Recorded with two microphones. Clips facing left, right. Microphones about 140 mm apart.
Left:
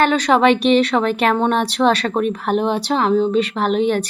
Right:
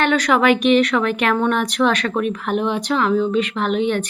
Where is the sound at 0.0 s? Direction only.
30° left (ahead or behind).